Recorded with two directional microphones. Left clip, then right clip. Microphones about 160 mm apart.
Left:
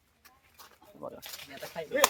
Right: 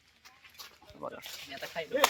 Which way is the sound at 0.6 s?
10° right (ahead or behind).